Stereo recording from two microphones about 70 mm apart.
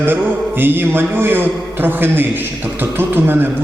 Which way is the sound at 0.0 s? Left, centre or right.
Right.